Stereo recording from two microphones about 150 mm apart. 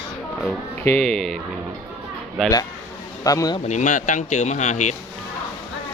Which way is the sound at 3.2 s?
25° left (ahead or behind).